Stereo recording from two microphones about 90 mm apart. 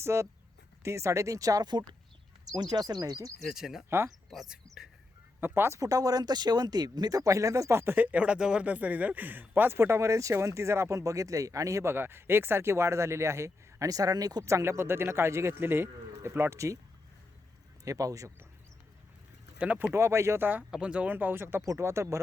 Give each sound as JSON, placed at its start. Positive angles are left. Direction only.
{"t": 0.0, "sound": "speech", "side_deg": -30}
{"t": 3.4, "sound": "speech", "side_deg": -5}
{"t": 3.8, "sound": "speech", "side_deg": -25}
{"t": 4.3, "sound": "speech", "side_deg": -5}
{"t": 5.4, "sound": "speech", "side_deg": -30}
{"t": 5.8, "sound": "speech", "side_deg": -45}
{"t": 17.8, "sound": "speech", "side_deg": -40}
{"t": 19.5, "sound": "speech", "side_deg": -15}
{"t": 19.9, "sound": "speech", "side_deg": -30}
{"t": 20.5, "sound": "speech", "side_deg": -15}